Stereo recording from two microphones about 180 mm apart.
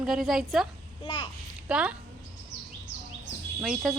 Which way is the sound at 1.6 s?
5° right (ahead or behind).